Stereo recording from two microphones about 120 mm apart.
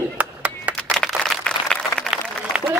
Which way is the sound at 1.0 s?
5° left (ahead or behind).